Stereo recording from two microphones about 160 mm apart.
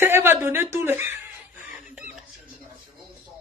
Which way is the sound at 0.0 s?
15° right (ahead or behind).